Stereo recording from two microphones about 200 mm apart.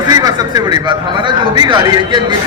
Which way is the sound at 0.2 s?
20° right (ahead or behind).